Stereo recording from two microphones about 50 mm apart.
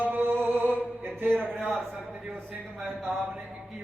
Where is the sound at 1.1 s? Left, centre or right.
Right.